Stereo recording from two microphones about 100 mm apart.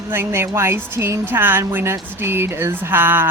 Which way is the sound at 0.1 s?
25° right (ahead or behind).